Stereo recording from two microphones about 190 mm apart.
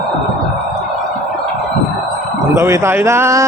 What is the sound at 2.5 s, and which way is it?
Speech, 15° right (ahead or behind).